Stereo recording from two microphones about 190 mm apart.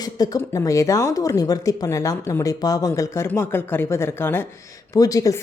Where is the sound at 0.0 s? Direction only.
20° left (ahead or behind).